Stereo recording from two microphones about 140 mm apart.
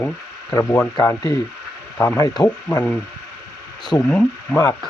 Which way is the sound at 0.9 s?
30° left (ahead or behind).